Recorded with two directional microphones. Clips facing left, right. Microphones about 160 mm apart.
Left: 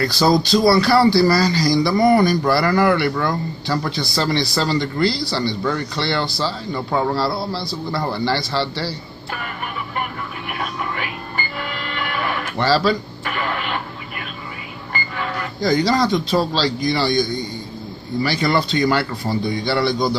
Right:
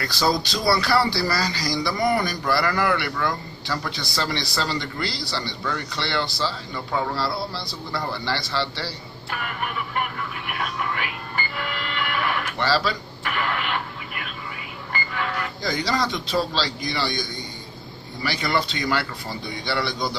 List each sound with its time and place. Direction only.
0.0 s speech: 35° left (ahead or behind)
12.5 s speech: 35° left (ahead or behind)
15.6 s speech: 40° left (ahead or behind)
18.2 s speech: 35° left (ahead or behind)